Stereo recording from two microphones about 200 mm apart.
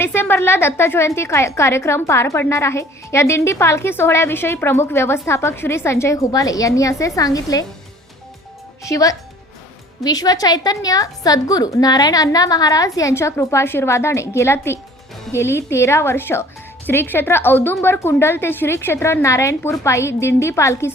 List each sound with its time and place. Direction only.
0.0 s a woman's voice: 10° left (ahead or behind)
8.8 s a woman's voice: 15° left (ahead or behind)